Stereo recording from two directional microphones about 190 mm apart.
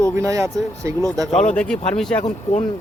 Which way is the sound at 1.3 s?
40° left (ahead or behind).